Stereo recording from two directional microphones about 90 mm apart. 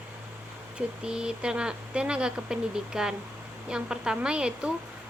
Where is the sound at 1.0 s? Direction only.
10° right (ahead or behind).